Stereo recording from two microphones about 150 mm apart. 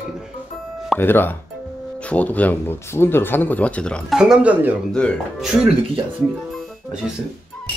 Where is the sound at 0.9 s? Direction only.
15° left (ahead or behind).